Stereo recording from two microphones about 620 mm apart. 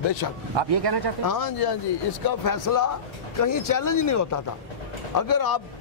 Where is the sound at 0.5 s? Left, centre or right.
Right.